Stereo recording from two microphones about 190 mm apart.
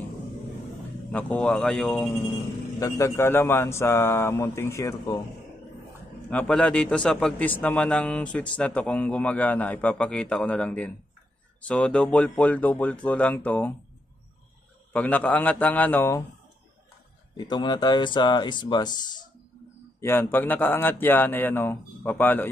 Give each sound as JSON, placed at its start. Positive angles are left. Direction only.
{"t": 1.1, "sound": "a man's voice", "side_deg": 5}
{"t": 6.3, "sound": "a man's voice", "side_deg": 5}
{"t": 14.9, "sound": "a man's voice", "side_deg": 10}
{"t": 17.4, "sound": "speech", "side_deg": 25}
{"t": 20.0, "sound": "a man's voice", "side_deg": 10}